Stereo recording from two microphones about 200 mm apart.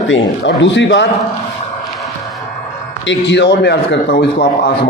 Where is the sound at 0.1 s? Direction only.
65° left (ahead or behind).